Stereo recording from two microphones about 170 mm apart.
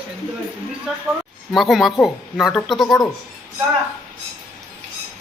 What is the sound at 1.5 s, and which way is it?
A man's voice, centre (ahead or behind).